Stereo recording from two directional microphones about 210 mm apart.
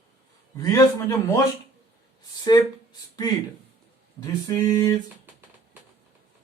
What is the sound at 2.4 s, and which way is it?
Speech, 20° left (ahead or behind).